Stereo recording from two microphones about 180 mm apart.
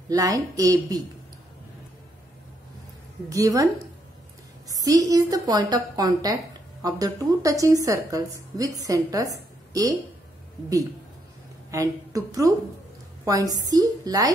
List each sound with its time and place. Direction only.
0.1 s a woman's voice: 20° right (ahead or behind)
3.3 s a woman's voice: 20° right (ahead or behind)
4.8 s a woman's voice: 20° right (ahead or behind)
11.7 s a woman's voice: 20° right (ahead or behind)